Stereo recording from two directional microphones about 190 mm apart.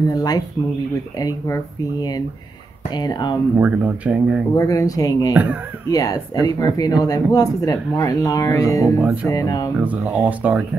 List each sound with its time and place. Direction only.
0.1 s speech: 20° left (ahead or behind)
3.5 s speech: 10° right (ahead or behind)
4.6 s speech: 15° left (ahead or behind)
5.3 s speech: 10° right (ahead or behind)
5.9 s speech: 20° left (ahead or behind)
9.0 s speech: 5° right (ahead or behind)
9.3 s speech: 20° left (ahead or behind)
9.8 s speech: 10° right (ahead or behind)